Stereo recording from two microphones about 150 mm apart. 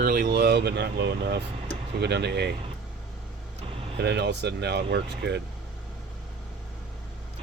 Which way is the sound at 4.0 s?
90° right.